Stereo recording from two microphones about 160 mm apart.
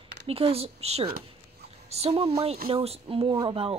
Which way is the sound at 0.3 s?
40° right (ahead or behind).